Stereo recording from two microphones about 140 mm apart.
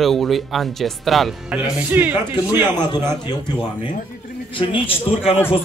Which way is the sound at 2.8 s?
30° left (ahead or behind).